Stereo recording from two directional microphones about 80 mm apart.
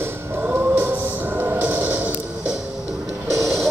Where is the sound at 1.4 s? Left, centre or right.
Right.